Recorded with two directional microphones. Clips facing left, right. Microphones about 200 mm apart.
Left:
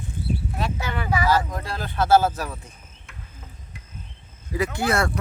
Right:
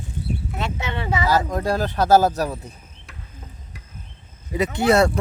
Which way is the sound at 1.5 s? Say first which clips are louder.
Right 9 dB; 45° right (ahead or behind).